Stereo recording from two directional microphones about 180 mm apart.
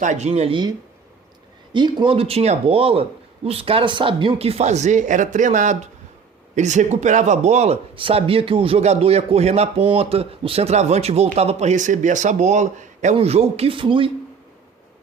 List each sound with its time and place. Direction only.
0.0 s speech: 40° right (ahead or behind)
1.7 s speech: 25° right (ahead or behind)